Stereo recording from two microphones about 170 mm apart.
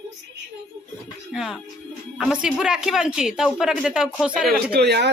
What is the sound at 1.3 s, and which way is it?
A woman's voice, centre (ahead or behind).